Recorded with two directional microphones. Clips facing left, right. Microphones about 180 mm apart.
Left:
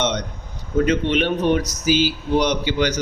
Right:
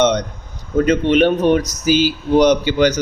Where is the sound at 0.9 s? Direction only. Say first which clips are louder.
Right 8 dB; 45° right (ahead or behind).